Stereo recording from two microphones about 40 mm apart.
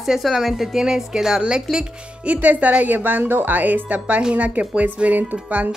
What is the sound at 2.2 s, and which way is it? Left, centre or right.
A woman's voice, right.